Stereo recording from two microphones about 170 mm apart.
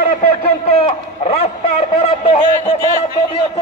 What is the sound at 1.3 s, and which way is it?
A man's voice, 35° left (ahead or behind).